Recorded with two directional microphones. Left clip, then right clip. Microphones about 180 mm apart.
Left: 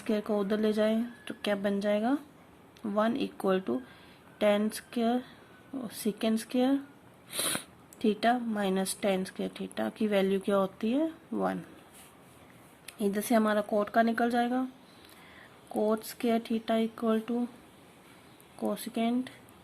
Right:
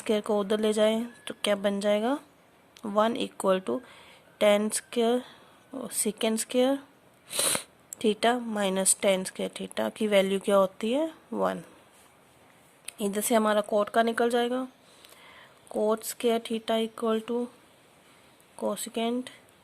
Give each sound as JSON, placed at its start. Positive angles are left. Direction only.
{"t": 0.0, "sound": "speech", "side_deg": -60}
{"t": 12.8, "sound": "speech", "side_deg": -60}
{"t": 15.7, "sound": "speech", "side_deg": -60}
{"t": 18.6, "sound": "speech", "side_deg": -60}